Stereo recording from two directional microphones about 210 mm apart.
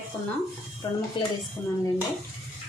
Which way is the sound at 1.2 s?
25° left (ahead or behind).